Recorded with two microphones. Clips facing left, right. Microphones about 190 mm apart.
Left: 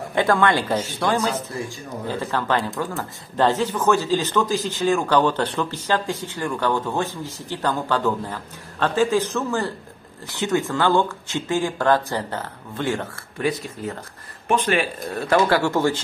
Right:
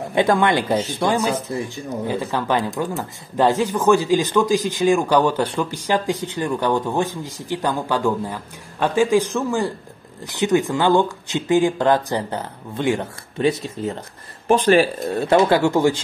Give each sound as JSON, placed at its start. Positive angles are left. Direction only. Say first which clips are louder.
{"t": 0.1, "sound": "speech", "louder": "right 2 dB", "side_deg": -15}
{"t": 14.5, "sound": "speech", "louder": "right 6 dB", "side_deg": -35}
{"t": 15.0, "sound": "speech", "louder": "right 3 dB", "side_deg": -25}